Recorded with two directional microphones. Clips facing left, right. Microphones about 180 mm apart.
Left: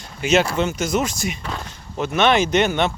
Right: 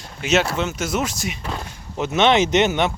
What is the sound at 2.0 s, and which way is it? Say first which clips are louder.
Speech: right 1 dB; 20° right (ahead or behind).